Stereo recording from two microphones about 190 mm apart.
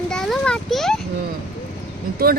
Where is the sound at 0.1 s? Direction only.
5° left (ahead or behind).